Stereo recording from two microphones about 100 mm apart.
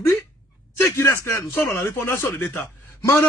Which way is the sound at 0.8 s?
25° left (ahead or behind).